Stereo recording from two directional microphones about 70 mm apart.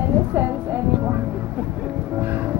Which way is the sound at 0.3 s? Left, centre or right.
Right.